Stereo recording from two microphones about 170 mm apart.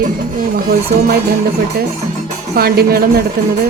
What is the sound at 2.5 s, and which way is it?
Speech, 65° right (ahead or behind).